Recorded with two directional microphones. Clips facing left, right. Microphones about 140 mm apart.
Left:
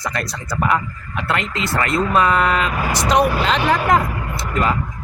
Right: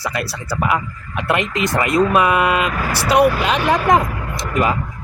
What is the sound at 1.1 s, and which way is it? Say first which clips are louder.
Speech: right 3 dB; 15° right (ahead or behind).